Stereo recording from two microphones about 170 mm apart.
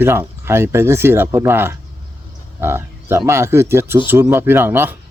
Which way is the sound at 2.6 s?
15° right (ahead or behind).